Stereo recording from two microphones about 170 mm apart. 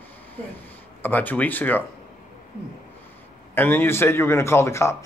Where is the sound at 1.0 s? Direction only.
10° left (ahead or behind).